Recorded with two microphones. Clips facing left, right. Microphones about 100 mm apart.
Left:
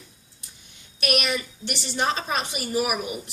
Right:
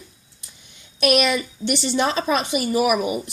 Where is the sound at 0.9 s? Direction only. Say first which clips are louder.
Right 7 dB; 90° right.